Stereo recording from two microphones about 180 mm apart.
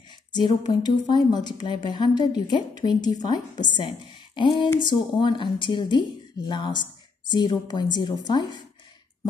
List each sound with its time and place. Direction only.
0.3 s a woman's voice: 25° left (ahead or behind)